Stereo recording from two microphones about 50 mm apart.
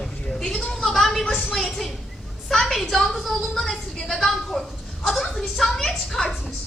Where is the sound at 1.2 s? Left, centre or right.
Left.